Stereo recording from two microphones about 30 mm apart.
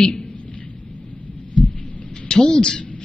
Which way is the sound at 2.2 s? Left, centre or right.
Left.